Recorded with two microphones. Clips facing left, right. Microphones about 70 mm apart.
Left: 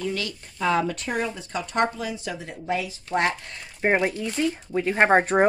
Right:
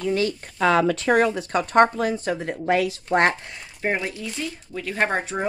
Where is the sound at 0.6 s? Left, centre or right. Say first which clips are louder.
Right 4 dB; right.